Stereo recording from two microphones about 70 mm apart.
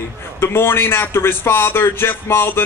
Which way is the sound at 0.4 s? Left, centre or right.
Left.